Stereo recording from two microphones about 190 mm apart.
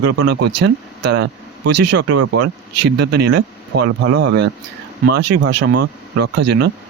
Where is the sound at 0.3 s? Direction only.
65° right (ahead or behind).